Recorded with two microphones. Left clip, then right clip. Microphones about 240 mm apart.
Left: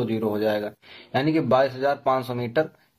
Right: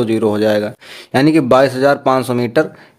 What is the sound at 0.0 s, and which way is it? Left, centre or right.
Speech, right.